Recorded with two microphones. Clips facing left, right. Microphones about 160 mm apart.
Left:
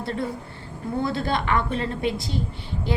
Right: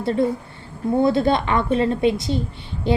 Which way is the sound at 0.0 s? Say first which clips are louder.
Right 8 dB; 20° right (ahead or behind).